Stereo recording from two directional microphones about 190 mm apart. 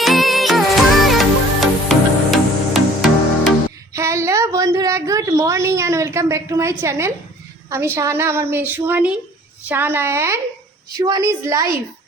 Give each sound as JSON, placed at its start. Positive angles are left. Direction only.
{"t": 0.0, "sound": "music", "side_deg": 0}
{"t": 3.9, "sound": "a sound", "side_deg": -15}
{"t": 7.9, "sound": "speech", "side_deg": -15}